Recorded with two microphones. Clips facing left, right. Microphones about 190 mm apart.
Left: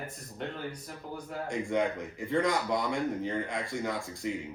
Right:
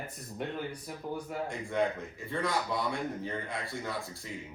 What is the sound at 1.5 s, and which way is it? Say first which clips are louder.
A man's voice: left 3 dB; 15° left (ahead or behind).